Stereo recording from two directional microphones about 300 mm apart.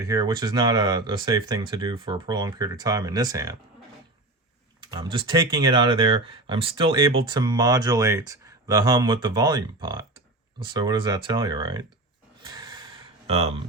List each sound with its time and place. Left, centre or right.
0.0 s speech: centre
4.8 s speech: centre
12.5 s a sound: centre